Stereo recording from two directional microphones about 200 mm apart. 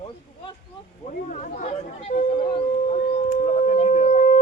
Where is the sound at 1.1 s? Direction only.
40° left (ahead or behind).